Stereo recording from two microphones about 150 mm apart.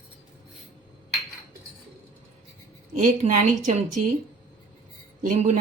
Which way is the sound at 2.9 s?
55° right (ahead or behind).